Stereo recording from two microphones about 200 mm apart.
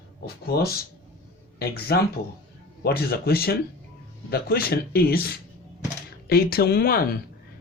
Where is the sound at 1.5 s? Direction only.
50° left (ahead or behind).